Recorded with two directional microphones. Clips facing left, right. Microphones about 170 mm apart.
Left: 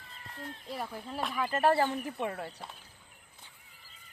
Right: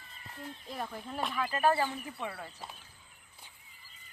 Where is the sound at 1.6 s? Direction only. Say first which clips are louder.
Left 2 dB; 40° left (ahead or behind).